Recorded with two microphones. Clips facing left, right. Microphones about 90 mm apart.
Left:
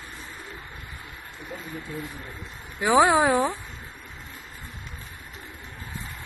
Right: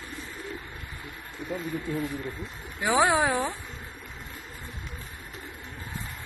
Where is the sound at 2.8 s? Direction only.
10° left (ahead or behind).